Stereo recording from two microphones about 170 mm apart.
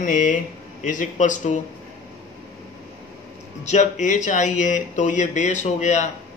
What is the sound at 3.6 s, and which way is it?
Speech, 45° left (ahead or behind).